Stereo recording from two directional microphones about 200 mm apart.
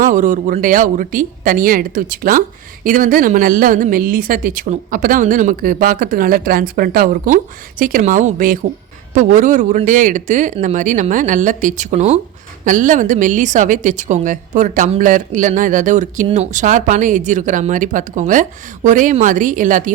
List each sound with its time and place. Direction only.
0.0 s speech: 40° right (ahead or behind)